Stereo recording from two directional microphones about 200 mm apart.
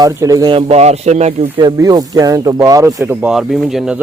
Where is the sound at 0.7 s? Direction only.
30° right (ahead or behind).